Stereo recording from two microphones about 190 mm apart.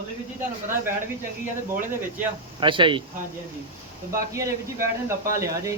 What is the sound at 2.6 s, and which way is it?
Speech, 25° right (ahead or behind).